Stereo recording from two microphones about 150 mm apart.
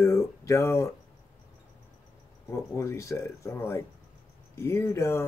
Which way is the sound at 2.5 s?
20° left (ahead or behind).